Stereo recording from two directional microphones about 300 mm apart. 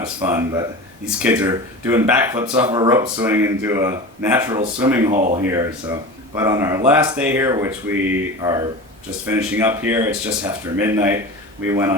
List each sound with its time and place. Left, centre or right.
0.0 s speech: centre